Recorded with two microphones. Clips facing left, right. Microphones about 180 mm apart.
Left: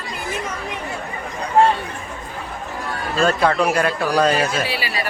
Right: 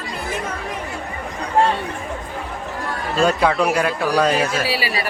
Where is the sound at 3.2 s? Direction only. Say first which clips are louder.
Even; 10° right (ahead or behind).